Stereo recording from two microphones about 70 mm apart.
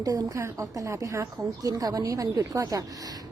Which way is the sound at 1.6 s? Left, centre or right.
Right.